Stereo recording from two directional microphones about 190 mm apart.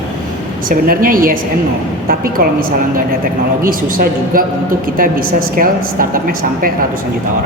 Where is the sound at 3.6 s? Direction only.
50° right (ahead or behind).